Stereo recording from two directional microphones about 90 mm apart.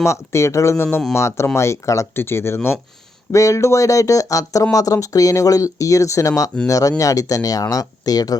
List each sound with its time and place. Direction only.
0.0 s speech: 30° left (ahead or behind)